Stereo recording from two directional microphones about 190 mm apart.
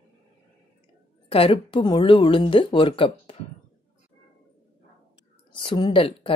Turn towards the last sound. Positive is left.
turn(degrees=30)  # may be behind; listen again after turning